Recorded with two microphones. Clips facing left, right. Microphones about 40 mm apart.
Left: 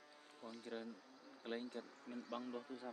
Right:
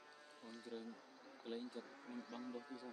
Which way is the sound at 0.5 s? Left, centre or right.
Left.